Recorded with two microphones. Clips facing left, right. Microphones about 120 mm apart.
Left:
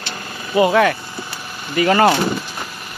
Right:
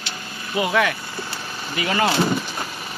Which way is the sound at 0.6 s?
40° left (ahead or behind).